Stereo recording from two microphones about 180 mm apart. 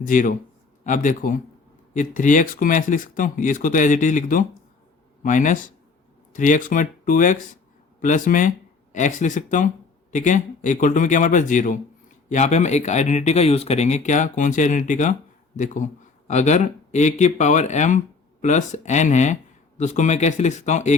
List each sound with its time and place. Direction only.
0.0 s speech: 45° left (ahead or behind)